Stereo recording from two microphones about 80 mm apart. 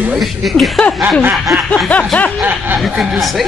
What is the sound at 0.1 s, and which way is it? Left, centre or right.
Speech, centre.